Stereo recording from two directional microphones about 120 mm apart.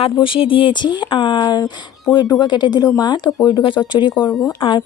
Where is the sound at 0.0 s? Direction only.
45° left (ahead or behind).